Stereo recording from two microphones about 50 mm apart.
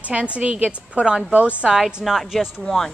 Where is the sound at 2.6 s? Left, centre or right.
Centre.